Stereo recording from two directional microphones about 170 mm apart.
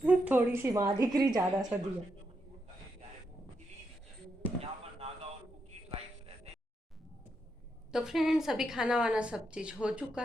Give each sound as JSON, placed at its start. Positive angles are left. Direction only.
{"t": 0.0, "sound": "a woman's voice", "side_deg": -10}
{"t": 4.6, "sound": "basketball bounce", "side_deg": -35}
{"t": 5.9, "sound": "a sound", "side_deg": -35}
{"t": 7.9, "sound": "a woman's voice", "side_deg": -5}